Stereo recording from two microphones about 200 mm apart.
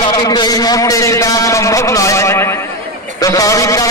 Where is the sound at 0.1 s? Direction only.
20° left (ahead or behind).